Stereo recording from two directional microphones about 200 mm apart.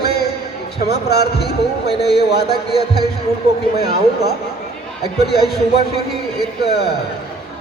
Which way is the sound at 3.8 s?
50° left (ahead or behind).